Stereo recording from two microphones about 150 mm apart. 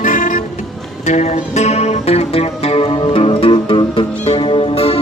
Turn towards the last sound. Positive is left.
turn(degrees=40)  # may be behind; listen again after turning